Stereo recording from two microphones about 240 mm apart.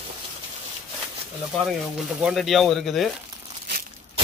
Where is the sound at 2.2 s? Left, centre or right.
Centre.